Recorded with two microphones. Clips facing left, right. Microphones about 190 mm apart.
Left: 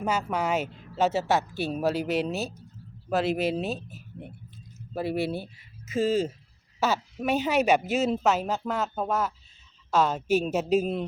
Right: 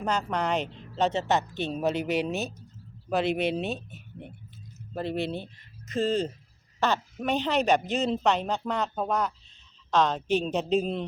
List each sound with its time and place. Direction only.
0.0 s a woman's voice: 5° left (ahead or behind)